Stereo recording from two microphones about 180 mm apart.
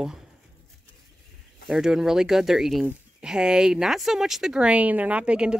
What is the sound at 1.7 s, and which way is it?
Speech, centre (ahead or behind).